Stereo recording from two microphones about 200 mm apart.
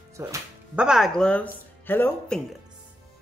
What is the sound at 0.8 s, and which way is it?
Speech, centre (ahead or behind).